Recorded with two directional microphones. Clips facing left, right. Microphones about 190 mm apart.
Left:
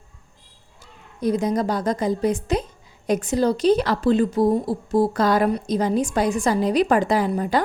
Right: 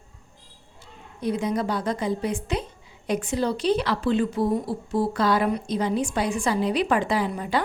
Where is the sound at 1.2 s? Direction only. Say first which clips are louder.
Left 4 dB; 40° left (ahead or behind).